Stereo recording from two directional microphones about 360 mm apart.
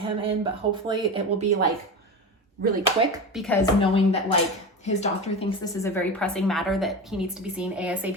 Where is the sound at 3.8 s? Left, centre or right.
Centre.